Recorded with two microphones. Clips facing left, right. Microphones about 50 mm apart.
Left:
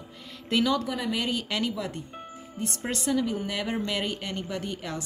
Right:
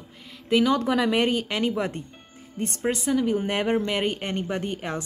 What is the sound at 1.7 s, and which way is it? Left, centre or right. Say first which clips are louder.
Speech: right 6 dB; right.